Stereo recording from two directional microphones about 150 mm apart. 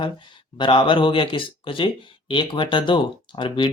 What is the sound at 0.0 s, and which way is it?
Speech, 30° left (ahead or behind).